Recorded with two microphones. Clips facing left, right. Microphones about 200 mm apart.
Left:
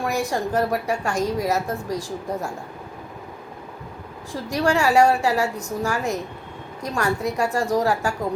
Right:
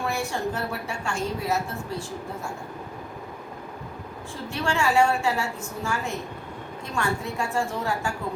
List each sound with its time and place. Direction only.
0.0 s a woman's voice: 35° left (ahead or behind)
4.3 s a woman's voice: 40° left (ahead or behind)